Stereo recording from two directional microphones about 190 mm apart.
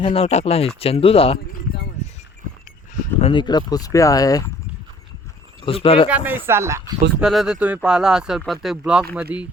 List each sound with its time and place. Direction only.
0.0 s speech: 30° left (ahead or behind)
3.2 s speech: 30° left (ahead or behind)
5.6 s speech: 30° left (ahead or behind)
6.1 s speech: 10° right (ahead or behind)
7.2 s speech: 5° right (ahead or behind)